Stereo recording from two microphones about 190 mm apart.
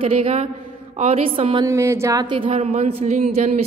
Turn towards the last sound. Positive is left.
turn(degrees=-35)  # may be behind; listen again after turning